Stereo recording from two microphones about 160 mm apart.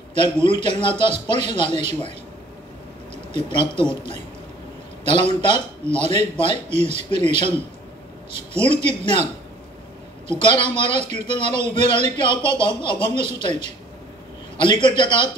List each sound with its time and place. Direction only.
0.1 s a man's voice: 30° left (ahead or behind)
3.3 s a man's voice: 30° left (ahead or behind)
5.0 s a man's voice: 30° left (ahead or behind)
8.5 s a man's voice: 30° left (ahead or behind)
14.6 s a man's voice: 30° left (ahead or behind)